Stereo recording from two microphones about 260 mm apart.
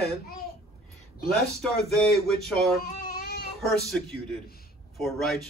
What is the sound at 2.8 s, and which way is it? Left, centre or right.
Baby cry, left.